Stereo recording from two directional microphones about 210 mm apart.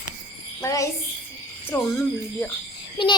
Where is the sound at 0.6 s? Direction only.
15° left (ahead or behind).